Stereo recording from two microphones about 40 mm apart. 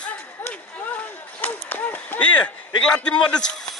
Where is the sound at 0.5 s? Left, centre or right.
Left.